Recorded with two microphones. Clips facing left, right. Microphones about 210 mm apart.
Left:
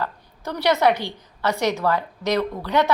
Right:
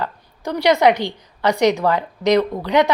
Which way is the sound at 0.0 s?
15° right (ahead or behind).